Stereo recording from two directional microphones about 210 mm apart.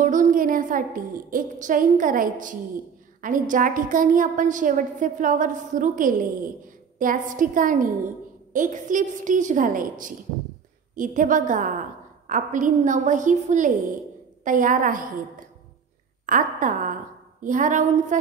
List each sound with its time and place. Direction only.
0.0 s a woman's voice: 40° right (ahead or behind)
16.3 s a woman's voice: 40° right (ahead or behind)